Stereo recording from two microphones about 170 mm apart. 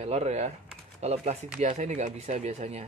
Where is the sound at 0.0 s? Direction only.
40° right (ahead or behind).